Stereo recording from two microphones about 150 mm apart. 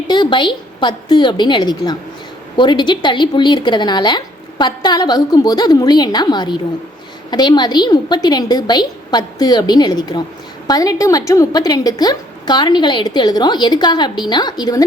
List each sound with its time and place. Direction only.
0.1 s a woman's voice: 30° left (ahead or behind)